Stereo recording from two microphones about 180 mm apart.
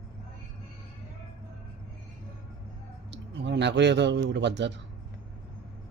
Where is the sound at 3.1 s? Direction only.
70° right (ahead or behind).